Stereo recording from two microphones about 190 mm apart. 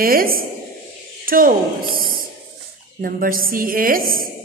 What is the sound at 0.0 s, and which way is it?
Speech, 50° right (ahead or behind).